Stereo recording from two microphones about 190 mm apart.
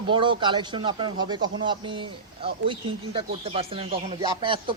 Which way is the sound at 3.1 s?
30° right (ahead or behind).